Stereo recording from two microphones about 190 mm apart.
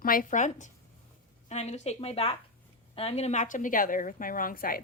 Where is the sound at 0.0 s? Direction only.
45° left (ahead or behind).